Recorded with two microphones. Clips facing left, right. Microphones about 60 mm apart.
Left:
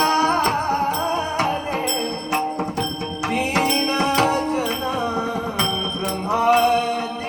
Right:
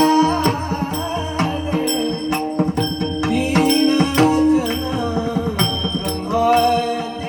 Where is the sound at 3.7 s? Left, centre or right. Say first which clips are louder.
Right 5 dB; left.